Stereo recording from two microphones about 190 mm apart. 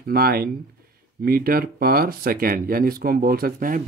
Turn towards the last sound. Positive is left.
turn(degrees=-50)  # may be behind; listen again after turning